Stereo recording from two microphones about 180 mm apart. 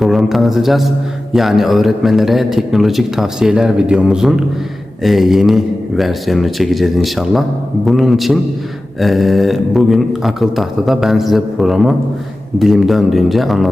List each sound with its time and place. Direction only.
0.0 s a man's voice: centre (ahead or behind)